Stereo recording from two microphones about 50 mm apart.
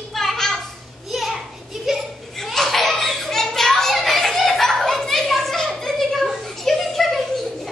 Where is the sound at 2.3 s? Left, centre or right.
Centre.